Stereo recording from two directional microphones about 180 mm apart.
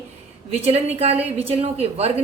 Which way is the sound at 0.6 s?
35° right (ahead or behind).